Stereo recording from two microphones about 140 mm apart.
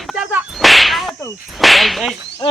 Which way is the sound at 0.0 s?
Centre (ahead or behind).